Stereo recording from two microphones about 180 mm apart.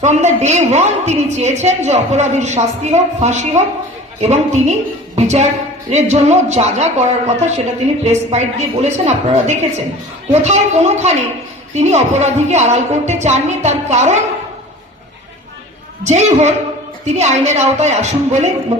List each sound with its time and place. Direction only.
0.0 s a woman's voice: 40° right (ahead or behind)
16.0 s a woman's voice: 40° right (ahead or behind)